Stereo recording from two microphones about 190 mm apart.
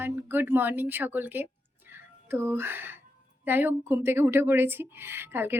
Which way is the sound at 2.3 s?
10° right (ahead or behind).